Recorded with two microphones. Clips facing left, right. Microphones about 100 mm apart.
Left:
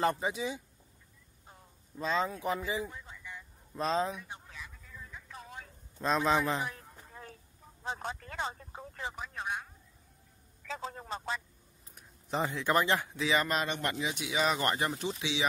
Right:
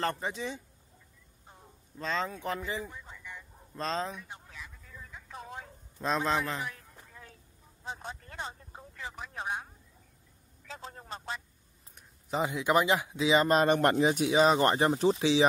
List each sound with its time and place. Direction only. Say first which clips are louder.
0.0 s a man's voice: left 2 dB; 10° left (ahead or behind)
2.0 s speech: left 2 dB; 10° left (ahead or behind)
5.3 s telephone: right 5 dB; 30° right (ahead or behind)
5.9 s a man's voice: left 1 dB; centre (ahead or behind); by 6.7 s 15° left (ahead or behind)
7.1 s a sound: left 4 dB; 40° left (ahead or behind)
7.8 s a sound: left 3 dB; 75° left (ahead or behind); by 8.8 s 90° left
9.3 s speech: right 1 dB; 25° right (ahead or behind)
11.9 s speech: right 1 dB; 5° right (ahead or behind)
13.5 s speech: right 9 dB; 40° right (ahead or behind)